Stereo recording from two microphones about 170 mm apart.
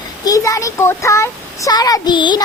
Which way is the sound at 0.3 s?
20° left (ahead or behind).